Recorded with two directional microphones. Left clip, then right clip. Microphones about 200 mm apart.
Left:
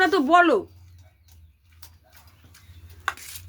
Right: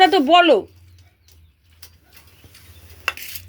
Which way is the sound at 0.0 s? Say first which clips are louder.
Right 5 dB; centre (ahead or behind).